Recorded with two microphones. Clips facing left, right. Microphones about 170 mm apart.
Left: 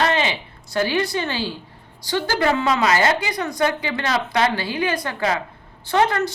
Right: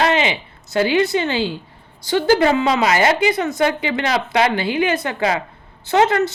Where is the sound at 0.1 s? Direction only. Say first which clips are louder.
Right 3 dB; 15° right (ahead or behind).